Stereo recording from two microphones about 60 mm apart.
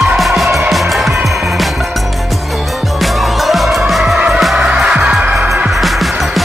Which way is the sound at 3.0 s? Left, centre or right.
Centre.